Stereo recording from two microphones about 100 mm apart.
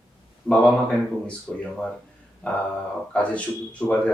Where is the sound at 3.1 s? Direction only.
10° left (ahead or behind).